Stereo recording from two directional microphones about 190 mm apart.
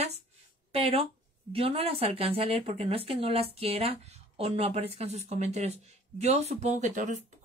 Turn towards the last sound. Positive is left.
turn(degrees=-40)  # may be behind; listen again after turning